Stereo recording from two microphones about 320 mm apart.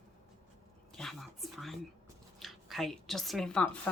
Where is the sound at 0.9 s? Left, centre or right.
Centre.